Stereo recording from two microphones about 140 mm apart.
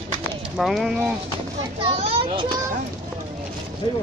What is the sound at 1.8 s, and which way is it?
Speech, 40° right (ahead or behind).